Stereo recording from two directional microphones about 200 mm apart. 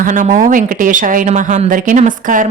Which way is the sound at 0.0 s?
40° right (ahead or behind).